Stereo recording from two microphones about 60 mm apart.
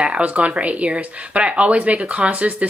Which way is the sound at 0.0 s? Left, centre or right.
Right.